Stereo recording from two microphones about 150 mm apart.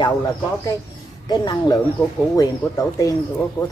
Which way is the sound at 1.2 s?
25° left (ahead or behind).